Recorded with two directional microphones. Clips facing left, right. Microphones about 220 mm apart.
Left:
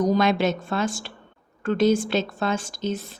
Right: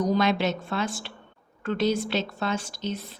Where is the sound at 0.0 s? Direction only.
50° left (ahead or behind).